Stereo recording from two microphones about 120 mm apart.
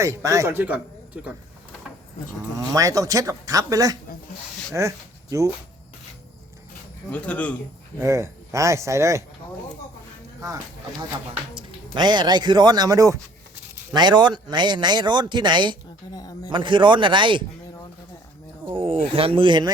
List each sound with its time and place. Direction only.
0.0 s speech: 25° right (ahead or behind)
2.6 s speech: 30° right (ahead or behind)
7.1 s speech: 10° left (ahead or behind)
8.0 s speech: 25° right (ahead or behind)
10.4 s speech: 30° right (ahead or behind)
11.5 s speech: 40° right (ahead or behind)
16.1 s speech: 30° left (ahead or behind)
16.5 s speech: 40° right (ahead or behind)
18.7 s speech: 50° right (ahead or behind)